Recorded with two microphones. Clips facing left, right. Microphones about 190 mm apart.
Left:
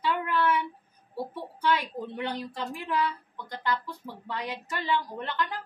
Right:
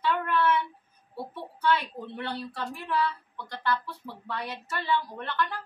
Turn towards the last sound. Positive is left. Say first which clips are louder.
# even
turn(degrees=15)  # may be behind; listen again after turning